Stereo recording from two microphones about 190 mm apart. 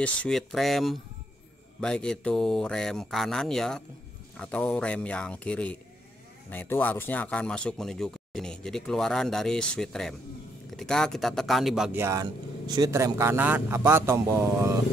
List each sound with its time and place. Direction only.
0.0 s a man's voice: 5° left (ahead or behind); by 14.7 s 15° right (ahead or behind)